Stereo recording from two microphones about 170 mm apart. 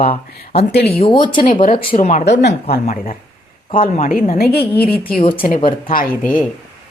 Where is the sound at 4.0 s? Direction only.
50° left (ahead or behind).